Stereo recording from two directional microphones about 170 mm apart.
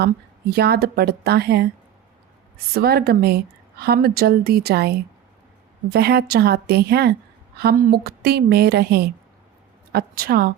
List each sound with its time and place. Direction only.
0.5 s a woman's voice: 65° right (ahead or behind)
2.7 s a woman's voice: 65° right (ahead or behind)